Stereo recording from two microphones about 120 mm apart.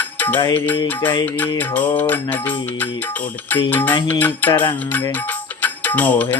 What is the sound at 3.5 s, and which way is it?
Music, 15° left (ahead or behind).